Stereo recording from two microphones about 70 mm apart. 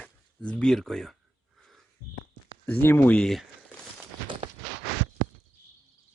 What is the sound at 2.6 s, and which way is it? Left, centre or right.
Speech, left.